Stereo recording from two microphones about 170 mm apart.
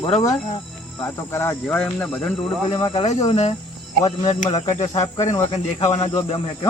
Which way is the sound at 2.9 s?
40° left (ahead or behind).